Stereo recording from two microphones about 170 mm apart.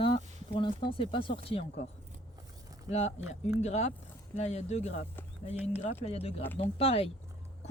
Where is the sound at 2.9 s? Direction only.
40° left (ahead or behind).